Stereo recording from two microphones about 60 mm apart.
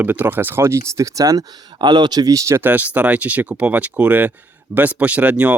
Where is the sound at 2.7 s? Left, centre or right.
Right.